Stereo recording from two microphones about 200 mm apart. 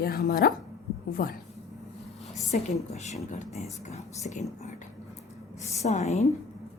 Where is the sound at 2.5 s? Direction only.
35° left (ahead or behind).